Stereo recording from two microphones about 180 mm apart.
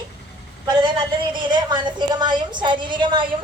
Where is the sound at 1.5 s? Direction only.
25° right (ahead or behind).